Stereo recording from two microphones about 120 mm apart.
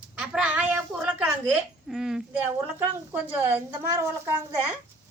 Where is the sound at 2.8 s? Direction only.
15° right (ahead or behind).